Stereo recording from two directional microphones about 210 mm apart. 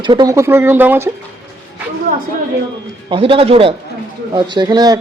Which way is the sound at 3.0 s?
25° right (ahead or behind).